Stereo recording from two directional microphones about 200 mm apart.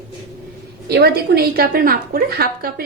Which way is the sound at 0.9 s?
55° right (ahead or behind).